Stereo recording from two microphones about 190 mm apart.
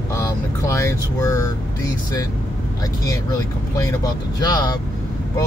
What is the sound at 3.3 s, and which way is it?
Speech, 15° left (ahead or behind).